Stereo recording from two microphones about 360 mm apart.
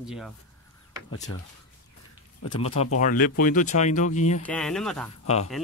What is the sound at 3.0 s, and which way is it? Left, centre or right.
Speech, left.